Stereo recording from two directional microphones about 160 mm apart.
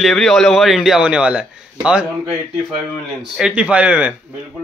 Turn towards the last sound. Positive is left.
turn(degrees=-5)  # may be behind; listen again after turning